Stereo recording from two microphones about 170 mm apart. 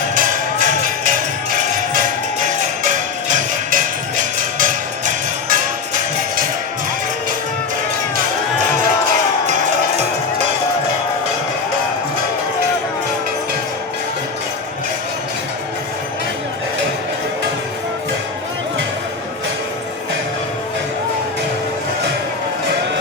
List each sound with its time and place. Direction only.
0.1 s music: 50° right (ahead or behind)
2.8 s music: 50° right (ahead or behind)